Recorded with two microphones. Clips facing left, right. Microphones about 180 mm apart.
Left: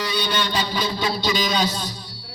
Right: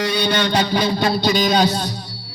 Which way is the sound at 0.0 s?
60° right (ahead or behind).